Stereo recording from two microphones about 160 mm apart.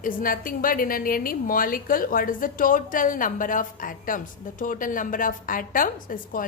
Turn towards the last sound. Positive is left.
turn(degrees=60)  # may be behind; listen again after turning